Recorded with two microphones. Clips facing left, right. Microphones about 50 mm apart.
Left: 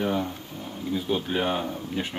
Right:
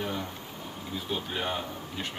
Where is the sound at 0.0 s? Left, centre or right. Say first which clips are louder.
Left 7 dB; centre.